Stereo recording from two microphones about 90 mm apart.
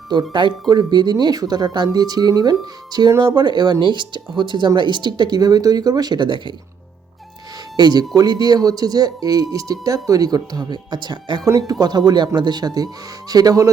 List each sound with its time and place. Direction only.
0.1 s speech: 60° right (ahead or behind)
7.8 s speech: 50° right (ahead or behind)
11.4 s speech: 40° right (ahead or behind)